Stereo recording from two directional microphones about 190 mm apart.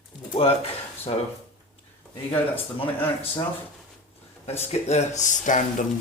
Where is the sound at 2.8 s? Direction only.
10° left (ahead or behind).